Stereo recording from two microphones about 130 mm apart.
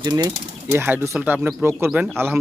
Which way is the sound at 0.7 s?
20° right (ahead or behind).